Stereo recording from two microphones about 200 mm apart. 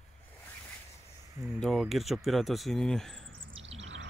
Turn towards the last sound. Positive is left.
turn(degrees=-70)  # may be behind; listen again after turning